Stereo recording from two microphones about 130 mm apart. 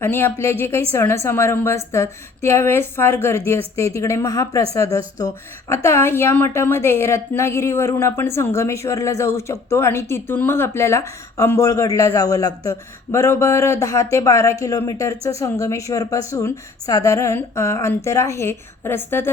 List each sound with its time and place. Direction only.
0.0 s a woman's voice: 15° left (ahead or behind)